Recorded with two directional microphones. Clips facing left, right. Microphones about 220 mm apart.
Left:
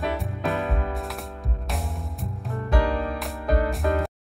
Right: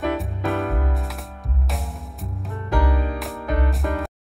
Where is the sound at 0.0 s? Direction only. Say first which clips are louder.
Right 3 dB; centre (ahead or behind).